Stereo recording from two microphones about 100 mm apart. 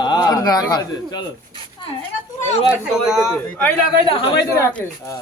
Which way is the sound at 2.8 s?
5° right (ahead or behind).